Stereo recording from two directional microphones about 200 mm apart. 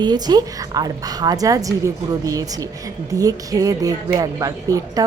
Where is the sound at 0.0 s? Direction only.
20° right (ahead or behind).